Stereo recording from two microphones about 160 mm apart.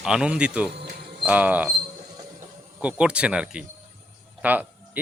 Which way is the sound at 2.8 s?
5° right (ahead or behind).